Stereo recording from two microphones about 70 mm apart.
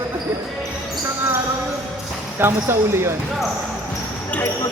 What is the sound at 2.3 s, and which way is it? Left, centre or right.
Speech, right.